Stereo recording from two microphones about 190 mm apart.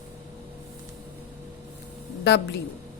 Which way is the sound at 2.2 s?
65° left (ahead or behind).